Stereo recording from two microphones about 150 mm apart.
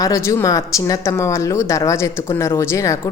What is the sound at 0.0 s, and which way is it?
A woman's voice, 20° left (ahead or behind).